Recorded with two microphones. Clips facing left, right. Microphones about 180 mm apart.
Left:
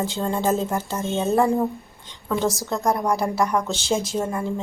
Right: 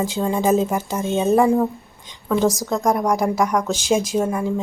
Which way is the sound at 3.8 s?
15° right (ahead or behind).